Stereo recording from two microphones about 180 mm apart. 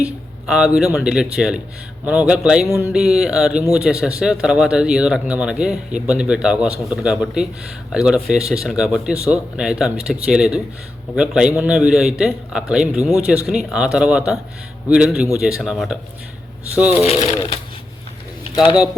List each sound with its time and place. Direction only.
0.0 s a sound: 5° right (ahead or behind)
0.9 s speech: 5° right (ahead or behind)
17.0 s speech: 35° left (ahead or behind)